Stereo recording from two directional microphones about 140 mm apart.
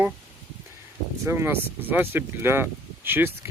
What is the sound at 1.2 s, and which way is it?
Speech, 20° right (ahead or behind).